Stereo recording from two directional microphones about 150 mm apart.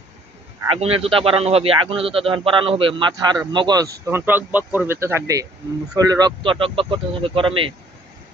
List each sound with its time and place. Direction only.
0.7 s a man's voice: 40° right (ahead or behind)